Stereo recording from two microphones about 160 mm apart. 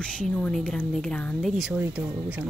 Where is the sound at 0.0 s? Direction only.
5° left (ahead or behind).